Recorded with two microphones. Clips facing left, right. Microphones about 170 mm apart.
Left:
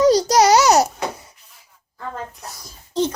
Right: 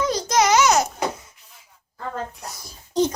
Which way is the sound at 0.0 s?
35° left (ahead or behind).